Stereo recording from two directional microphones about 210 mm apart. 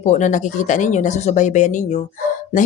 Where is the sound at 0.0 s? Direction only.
35° left (ahead or behind).